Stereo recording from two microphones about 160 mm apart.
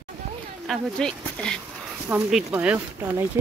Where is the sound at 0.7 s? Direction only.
5° left (ahead or behind).